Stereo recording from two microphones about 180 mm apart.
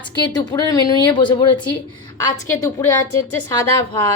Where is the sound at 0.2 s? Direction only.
20° left (ahead or behind).